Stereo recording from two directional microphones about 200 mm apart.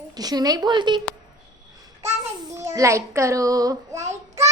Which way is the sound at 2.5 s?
15° right (ahead or behind).